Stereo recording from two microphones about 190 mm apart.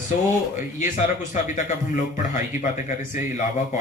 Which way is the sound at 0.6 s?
45° left (ahead or behind).